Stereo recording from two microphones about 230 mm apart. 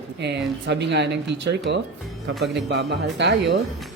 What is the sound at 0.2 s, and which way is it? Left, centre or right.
Speech, right.